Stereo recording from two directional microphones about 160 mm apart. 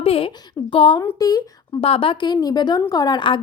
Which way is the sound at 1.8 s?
35° left (ahead or behind).